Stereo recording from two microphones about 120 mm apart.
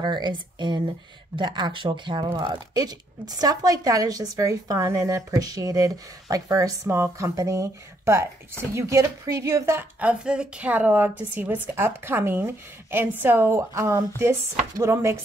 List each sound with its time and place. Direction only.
0.0 s speech: 40° right (ahead or behind); by 15.1 s 25° right (ahead or behind)